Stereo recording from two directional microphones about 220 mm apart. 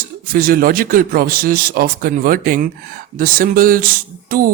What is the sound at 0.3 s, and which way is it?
Speech, 40° right (ahead or behind).